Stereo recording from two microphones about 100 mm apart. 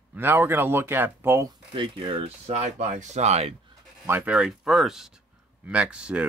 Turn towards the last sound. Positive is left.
turn(degrees=-10)  # may be behind; listen again after turning